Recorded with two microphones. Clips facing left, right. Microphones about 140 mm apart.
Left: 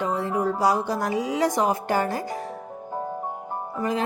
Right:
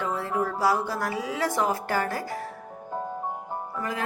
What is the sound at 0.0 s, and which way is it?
Speech, 20° left (ahead or behind).